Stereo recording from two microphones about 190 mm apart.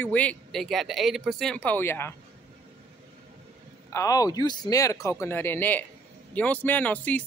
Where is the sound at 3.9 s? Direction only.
15° left (ahead or behind).